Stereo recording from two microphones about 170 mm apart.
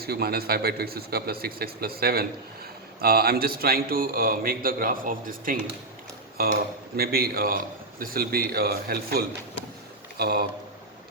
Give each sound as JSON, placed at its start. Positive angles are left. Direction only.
{"t": 0.0, "sound": "a man's voice", "side_deg": -65}